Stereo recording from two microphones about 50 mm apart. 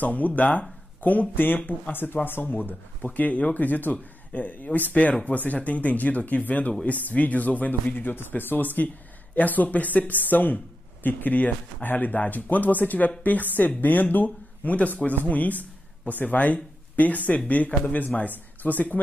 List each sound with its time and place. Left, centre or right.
0.0 s speech: left
1.3 s speech: left